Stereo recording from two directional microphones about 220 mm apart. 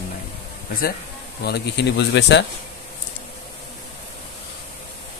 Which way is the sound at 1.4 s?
50° left (ahead or behind).